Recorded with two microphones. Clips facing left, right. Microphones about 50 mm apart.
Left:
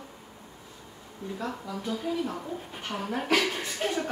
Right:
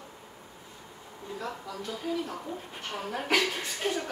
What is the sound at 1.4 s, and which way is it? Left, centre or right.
A woman's voice, centre.